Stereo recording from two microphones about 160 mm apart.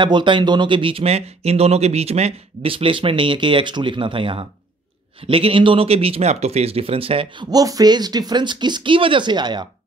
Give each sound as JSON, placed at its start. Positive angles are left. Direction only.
{"t": 0.0, "sound": "speech", "side_deg": -30}
{"t": 7.4, "sound": "speech", "side_deg": -25}